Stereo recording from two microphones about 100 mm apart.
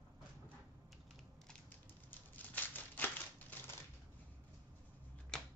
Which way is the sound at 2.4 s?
20° left (ahead or behind).